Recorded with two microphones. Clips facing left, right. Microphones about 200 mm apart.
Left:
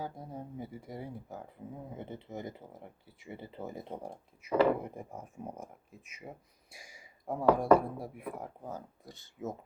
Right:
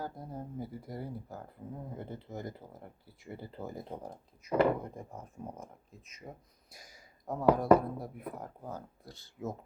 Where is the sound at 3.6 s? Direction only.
25° left (ahead or behind).